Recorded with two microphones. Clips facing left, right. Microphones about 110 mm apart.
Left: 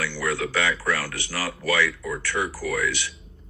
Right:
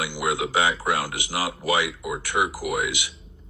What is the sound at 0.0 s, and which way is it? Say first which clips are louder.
Speech: right 1 dB; 15° right (ahead or behind).